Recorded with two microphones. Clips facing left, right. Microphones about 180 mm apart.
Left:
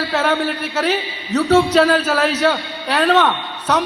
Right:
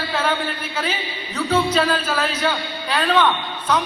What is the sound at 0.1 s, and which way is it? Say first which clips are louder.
A man's voice: left 3 dB; 75° left (ahead or behind).